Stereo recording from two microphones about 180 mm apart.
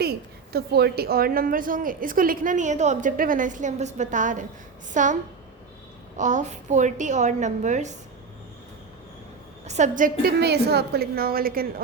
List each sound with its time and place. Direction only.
0.0 s a woman's voice: 60° right (ahead or behind); by 5.1 s 45° right (ahead or behind)
6.1 s a woman's voice: 45° right (ahead or behind)
9.6 s a woman's voice: 40° right (ahead or behind)